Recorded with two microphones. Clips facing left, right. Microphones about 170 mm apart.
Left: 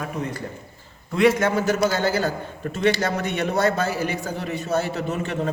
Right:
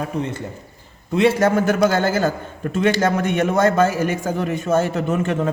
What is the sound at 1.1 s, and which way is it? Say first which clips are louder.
Speech: right 1 dB; 25° right (ahead or behind).